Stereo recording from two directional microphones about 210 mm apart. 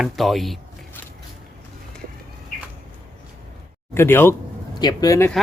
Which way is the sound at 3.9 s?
10° left (ahead or behind).